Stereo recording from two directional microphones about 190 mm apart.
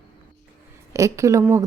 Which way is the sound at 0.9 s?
15° right (ahead or behind).